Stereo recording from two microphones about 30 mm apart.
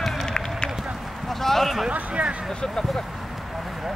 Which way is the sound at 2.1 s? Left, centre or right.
Right.